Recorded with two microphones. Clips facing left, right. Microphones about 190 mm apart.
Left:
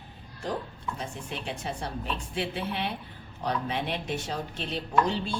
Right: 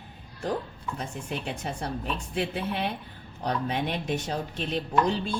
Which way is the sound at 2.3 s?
45° right (ahead or behind).